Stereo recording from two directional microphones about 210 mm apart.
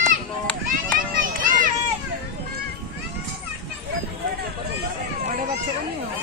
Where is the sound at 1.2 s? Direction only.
40° right (ahead or behind).